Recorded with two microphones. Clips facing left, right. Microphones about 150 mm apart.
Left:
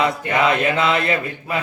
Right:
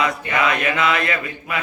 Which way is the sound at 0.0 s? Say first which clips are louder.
Left 2 dB; 30° left (ahead or behind).